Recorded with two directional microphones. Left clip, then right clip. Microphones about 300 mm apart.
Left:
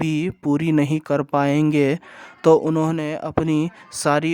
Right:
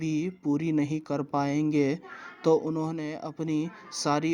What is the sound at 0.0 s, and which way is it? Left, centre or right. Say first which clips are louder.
Speech: left 7 dB; left.